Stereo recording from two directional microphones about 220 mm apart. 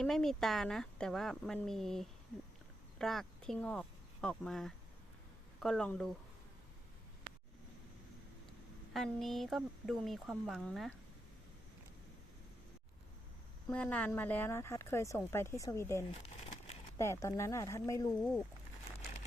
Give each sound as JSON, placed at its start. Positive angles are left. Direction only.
{"t": 0.0, "sound": "speech", "side_deg": 0}
{"t": 8.9, "sound": "speech", "side_deg": 0}
{"t": 13.7, "sound": "speech", "side_deg": 5}
{"t": 16.1, "sound": "crumpling", "side_deg": 30}
{"t": 17.0, "sound": "speech", "side_deg": 15}